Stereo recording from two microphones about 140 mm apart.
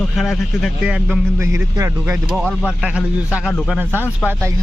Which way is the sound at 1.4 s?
20° right (ahead or behind).